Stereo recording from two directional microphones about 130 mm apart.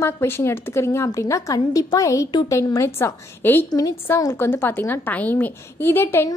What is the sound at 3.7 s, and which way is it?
A woman's voice, 30° left (ahead or behind).